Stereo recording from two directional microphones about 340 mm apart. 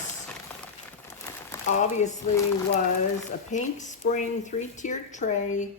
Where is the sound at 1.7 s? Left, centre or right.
Left.